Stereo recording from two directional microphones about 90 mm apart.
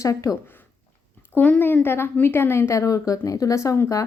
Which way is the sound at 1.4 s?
20° left (ahead or behind).